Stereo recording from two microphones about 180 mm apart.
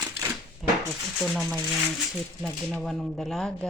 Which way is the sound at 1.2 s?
Centre (ahead or behind).